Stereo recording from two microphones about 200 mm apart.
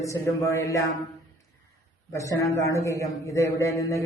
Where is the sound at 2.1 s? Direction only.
15° left (ahead or behind).